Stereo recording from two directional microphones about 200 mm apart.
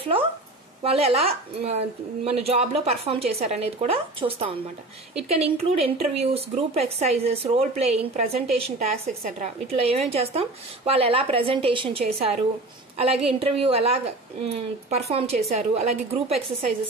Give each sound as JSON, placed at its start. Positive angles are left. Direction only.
{"t": 0.0, "sound": "a woman's voice", "side_deg": -25}